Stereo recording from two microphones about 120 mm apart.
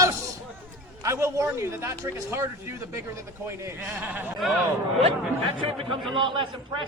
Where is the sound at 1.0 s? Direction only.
25° right (ahead or behind).